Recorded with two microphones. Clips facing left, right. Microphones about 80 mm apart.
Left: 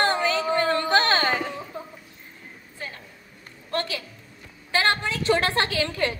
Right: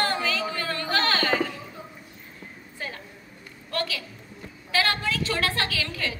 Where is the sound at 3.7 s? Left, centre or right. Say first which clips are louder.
Left 2 dB; left.